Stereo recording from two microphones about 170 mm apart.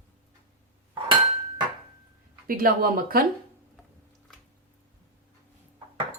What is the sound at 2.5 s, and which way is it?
Speech, 55° right (ahead or behind).